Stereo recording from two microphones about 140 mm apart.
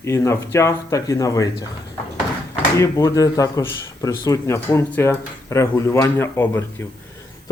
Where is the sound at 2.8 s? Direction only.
20° left (ahead or behind).